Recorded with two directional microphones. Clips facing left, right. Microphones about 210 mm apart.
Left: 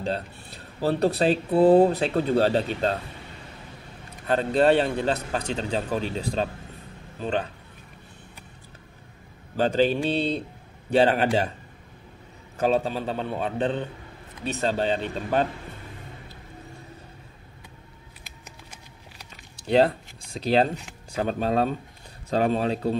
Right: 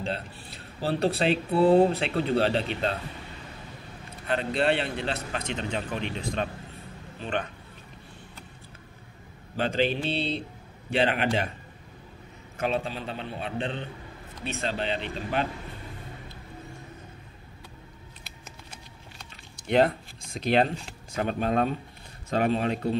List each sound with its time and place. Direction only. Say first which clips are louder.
0.7 s speech: left 3 dB; 45° left (ahead or behind)
4.3 s speech: left 6 dB; 40° left (ahead or behind)
9.6 s speech: left 5 dB; 40° left (ahead or behind)
12.5 s speech: left 6 dB; 40° left (ahead or behind)
14.5 s speech: left 5 dB; 40° left (ahead or behind)
19.6 s speech: left 2 dB; 35° left (ahead or behind)